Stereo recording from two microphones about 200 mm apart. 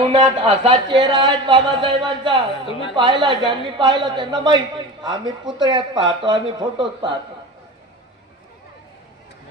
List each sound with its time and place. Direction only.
0.0 s speech: 25° right (ahead or behind)
2.6 s a woman's voice: 25° left (ahead or behind)
2.9 s speech: 25° right (ahead or behind)